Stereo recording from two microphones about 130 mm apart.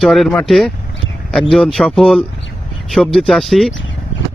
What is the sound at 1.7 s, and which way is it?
Speech, centre (ahead or behind).